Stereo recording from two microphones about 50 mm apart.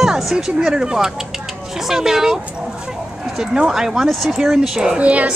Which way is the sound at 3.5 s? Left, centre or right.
Centre.